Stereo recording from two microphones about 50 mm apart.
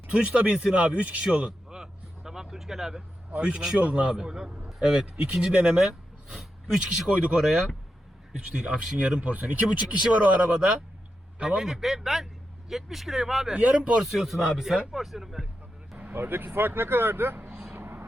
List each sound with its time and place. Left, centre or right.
0.1 s speech: right
1.3 s a sound: right; by 3.0 s centre
3.4 s speech: right
4.1 s speech: centre
6.3 s speech: centre
7.2 s speech: centre
11.4 s speech: centre
13.5 s speech: right
14.0 s speech: centre
16.0 s speech: right
17.7 s vehicle: right